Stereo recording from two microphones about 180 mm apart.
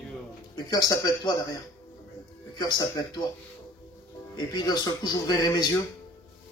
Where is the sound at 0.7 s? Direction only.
20° left (ahead or behind).